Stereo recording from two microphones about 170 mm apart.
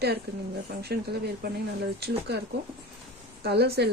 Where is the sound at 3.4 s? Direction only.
70° right (ahead or behind).